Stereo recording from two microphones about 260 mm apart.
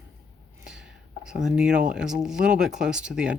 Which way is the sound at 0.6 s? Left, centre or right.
Centre.